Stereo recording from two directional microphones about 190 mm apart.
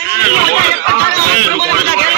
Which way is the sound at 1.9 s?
50° right (ahead or behind).